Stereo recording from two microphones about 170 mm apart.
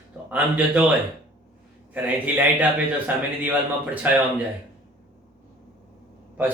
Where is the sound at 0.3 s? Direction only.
5° right (ahead or behind).